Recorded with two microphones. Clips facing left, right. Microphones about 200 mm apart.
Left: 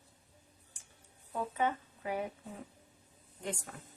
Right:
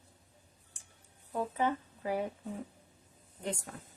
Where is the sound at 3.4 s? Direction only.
40° right (ahead or behind).